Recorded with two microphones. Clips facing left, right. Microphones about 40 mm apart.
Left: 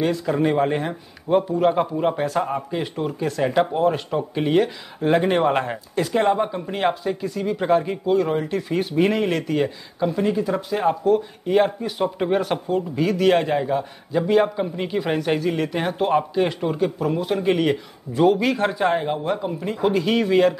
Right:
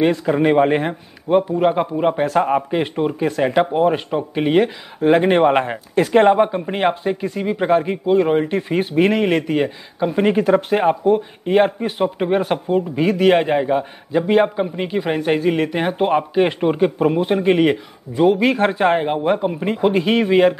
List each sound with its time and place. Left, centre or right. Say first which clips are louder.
0.0 s speech: right 5 dB; right
1.3 s a man's voice: right 3 dB; centre
2.2 s speech: right 6 dB; right
5.0 s a man's voice: right 5 dB; centre
5.3 s speech: right 5 dB; right
5.9 s speech: right 7 dB; right
10.1 s speech: right 9 dB; right
12.0 s speech: right 3 dB; centre
14.9 s a man's voice: right 2 dB; centre
15.1 s speech: right 6 dB; right
17.4 s speech: right 4 dB; right
18.1 s a man's voice: right 2 dB; centre
18.4 s speech: right 4 dB; right